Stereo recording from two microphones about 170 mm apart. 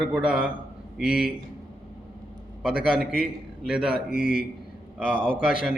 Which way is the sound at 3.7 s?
5° right (ahead or behind).